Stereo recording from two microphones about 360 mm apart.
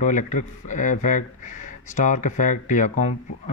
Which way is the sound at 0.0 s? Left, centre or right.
Left.